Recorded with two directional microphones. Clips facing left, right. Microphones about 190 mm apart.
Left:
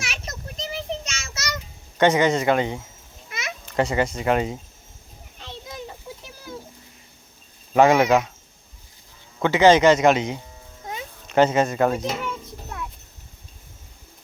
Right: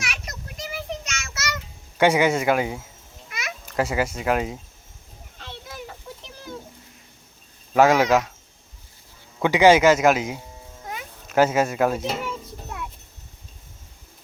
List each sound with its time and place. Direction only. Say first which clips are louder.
0.0 s child singing: left 1 dB; 25° left (ahead or behind)
2.0 s speech: even; 10° right (ahead or behind)
3.2 s a sound: left 1 dB; 25° left (ahead or behind)
3.8 s speech: left 2 dB; 5° right (ahead or behind)
5.4 s a sound: left 2 dB; 15° left (ahead or behind)
7.8 s speech: left 1 dB; 5° right (ahead or behind)
9.4 s a child's voice: even; 10° right (ahead or behind)